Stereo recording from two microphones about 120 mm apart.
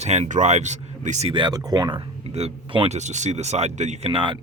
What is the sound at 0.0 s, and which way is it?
Speech, 70° right (ahead or behind).